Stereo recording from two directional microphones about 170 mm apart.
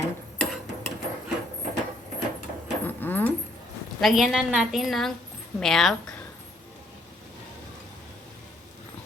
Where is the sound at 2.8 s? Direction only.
10° left (ahead or behind).